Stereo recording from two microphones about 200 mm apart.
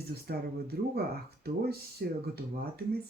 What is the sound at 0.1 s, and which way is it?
Speech, 50° right (ahead or behind).